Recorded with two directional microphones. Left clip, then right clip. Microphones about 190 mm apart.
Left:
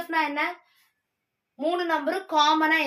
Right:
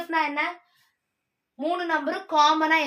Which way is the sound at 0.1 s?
10° right (ahead or behind).